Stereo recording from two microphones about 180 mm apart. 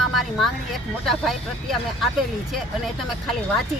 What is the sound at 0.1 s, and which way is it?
Vehicle, centre (ahead or behind).